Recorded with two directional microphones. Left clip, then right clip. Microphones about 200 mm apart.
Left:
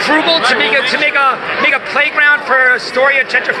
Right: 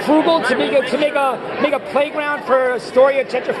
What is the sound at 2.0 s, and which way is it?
A man's voice, centre (ahead or behind).